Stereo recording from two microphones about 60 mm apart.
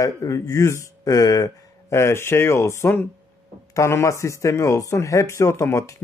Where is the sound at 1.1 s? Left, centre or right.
Left.